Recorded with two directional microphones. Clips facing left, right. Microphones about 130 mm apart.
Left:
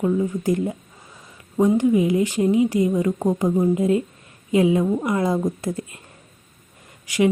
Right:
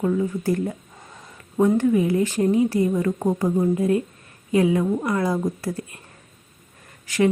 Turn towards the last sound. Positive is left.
turn(degrees=15)  # may be behind; listen again after turning